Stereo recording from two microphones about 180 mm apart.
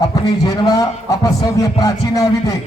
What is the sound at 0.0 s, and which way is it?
Speech, 20° left (ahead or behind).